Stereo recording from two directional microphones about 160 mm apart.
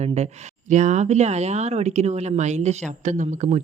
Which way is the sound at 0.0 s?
45° right (ahead or behind).